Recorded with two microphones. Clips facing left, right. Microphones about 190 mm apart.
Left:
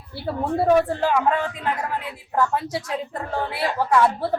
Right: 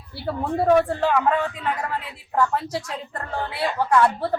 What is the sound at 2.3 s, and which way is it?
A man's voice, 5° left (ahead or behind).